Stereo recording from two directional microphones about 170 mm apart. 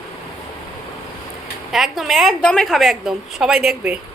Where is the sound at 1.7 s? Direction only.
Centre (ahead or behind).